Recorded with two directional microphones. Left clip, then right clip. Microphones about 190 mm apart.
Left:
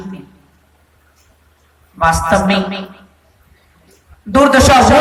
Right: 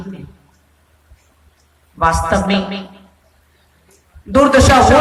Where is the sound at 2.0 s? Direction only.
50° left (ahead or behind).